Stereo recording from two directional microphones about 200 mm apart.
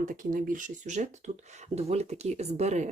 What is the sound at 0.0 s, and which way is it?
Speech, 40° right (ahead or behind).